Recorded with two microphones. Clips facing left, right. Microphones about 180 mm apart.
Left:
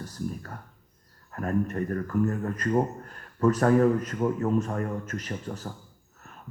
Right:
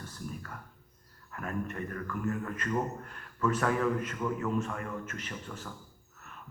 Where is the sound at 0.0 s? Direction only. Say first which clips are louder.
Left 7 dB; 40° left (ahead or behind).